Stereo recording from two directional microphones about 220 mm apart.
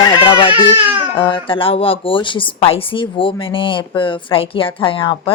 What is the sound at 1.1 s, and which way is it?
Speech, 20° left (ahead or behind).